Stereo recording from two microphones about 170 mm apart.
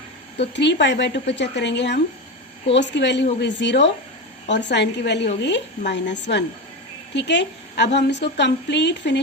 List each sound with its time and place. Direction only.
0.3 s a woman's voice: 90° left